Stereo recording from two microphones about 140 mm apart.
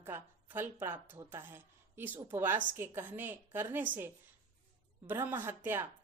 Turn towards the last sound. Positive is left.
turn(degrees=-15)  # may be behind; listen again after turning